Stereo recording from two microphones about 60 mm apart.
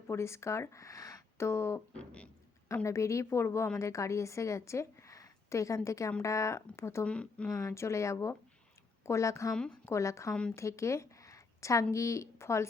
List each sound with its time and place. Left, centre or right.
0.1 s speech: left
1.9 s speech: centre
2.8 s a woman's voice: left
7.0 s speech: centre
7.5 s a woman's voice: left